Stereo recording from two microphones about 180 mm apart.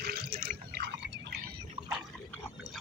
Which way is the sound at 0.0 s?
60° right (ahead or behind).